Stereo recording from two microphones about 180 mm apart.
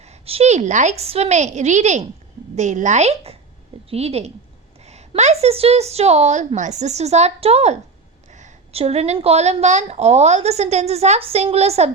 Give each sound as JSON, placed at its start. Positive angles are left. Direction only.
{"t": 0.0, "sound": "a woman's voice", "side_deg": -35}